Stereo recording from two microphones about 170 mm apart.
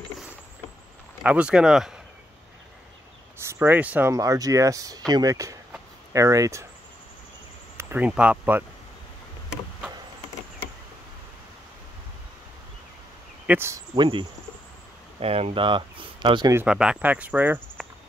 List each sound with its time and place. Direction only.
1.2 s speech: 5° right (ahead or behind)
3.3 s speech: 15° right (ahead or behind)
7.7 s speech: 10° right (ahead or behind)
13.5 s speech: 15° right (ahead or behind)
13.9 s speech: 30° right (ahead or behind)
16.5 s speech: 5° right (ahead or behind)